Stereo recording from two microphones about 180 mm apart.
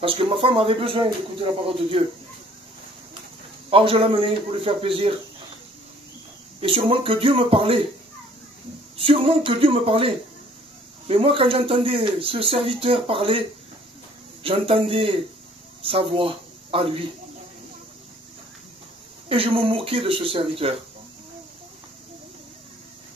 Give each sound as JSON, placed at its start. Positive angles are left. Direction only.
{"t": 0.0, "sound": "a man's voice", "side_deg": -30}
{"t": 3.7, "sound": "a man's voice", "side_deg": -30}
{"t": 6.6, "sound": "a man's voice", "side_deg": -30}
{"t": 8.9, "sound": "a man's voice", "side_deg": -30}
{"t": 19.2, "sound": "speech", "side_deg": -30}